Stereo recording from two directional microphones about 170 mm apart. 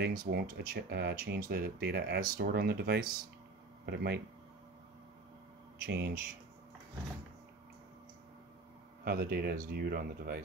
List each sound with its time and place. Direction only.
0.0 s speech: 65° right (ahead or behind)
5.9 s speech: 65° right (ahead or behind)
9.0 s speech: 65° right (ahead or behind)